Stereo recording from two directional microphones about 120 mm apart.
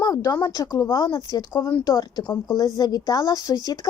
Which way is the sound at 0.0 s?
30° left (ahead or behind).